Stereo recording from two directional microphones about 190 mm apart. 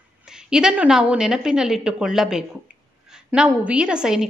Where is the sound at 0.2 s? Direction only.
5° right (ahead or behind).